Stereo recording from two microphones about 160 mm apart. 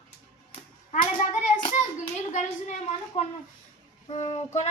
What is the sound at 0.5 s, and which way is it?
Hands, 45° left (ahead or behind).